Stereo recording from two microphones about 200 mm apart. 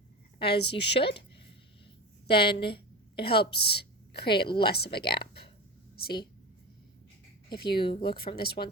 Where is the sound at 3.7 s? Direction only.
55° left (ahead or behind).